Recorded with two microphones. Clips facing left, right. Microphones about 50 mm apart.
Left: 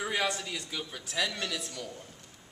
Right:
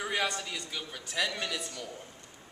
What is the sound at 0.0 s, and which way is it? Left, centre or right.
A man's voice, centre.